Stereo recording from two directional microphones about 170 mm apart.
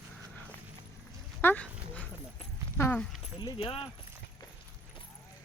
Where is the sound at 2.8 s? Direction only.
5° left (ahead or behind).